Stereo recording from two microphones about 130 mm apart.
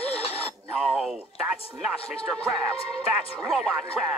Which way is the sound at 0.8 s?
5° right (ahead or behind).